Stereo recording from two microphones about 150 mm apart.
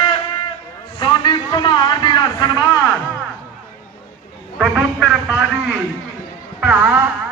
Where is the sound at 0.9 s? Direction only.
30° left (ahead or behind).